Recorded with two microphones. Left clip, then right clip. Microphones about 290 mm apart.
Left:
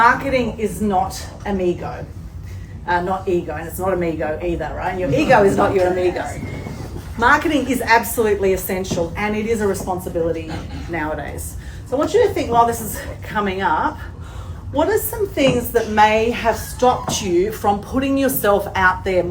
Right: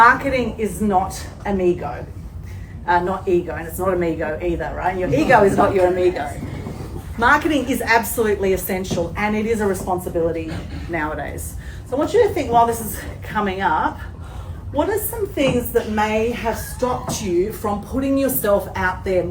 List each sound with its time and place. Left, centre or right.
0.0 s speech: centre
15.4 s speech: centre